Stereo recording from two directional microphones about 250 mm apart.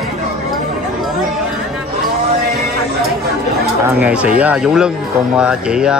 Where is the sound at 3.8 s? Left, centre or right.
Centre.